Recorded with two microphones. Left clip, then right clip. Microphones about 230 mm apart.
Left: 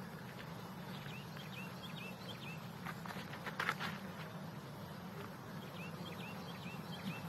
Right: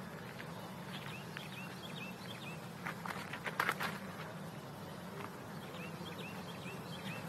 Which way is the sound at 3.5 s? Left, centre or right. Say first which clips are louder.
Right 3 dB; centre.